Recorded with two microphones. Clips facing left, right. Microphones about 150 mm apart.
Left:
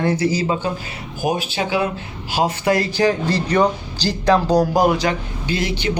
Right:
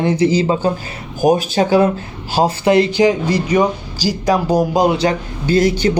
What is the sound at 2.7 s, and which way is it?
Speech, 20° right (ahead or behind).